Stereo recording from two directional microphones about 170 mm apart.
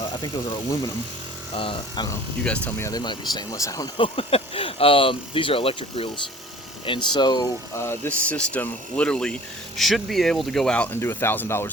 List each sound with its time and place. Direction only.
0.2 s speech: 25° left (ahead or behind)
2.4 s speech: 10° left (ahead or behind)
3.9 s speech: 30° left (ahead or behind); by 11.7 s 15° left (ahead or behind)